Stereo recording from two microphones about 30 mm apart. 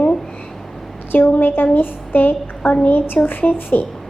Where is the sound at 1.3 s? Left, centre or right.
Left.